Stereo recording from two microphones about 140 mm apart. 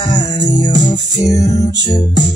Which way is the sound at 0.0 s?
30° left (ahead or behind).